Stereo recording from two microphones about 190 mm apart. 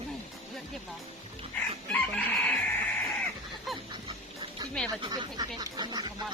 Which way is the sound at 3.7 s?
Centre (ahead or behind).